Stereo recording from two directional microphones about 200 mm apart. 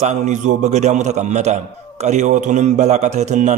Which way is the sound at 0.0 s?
35° right (ahead or behind).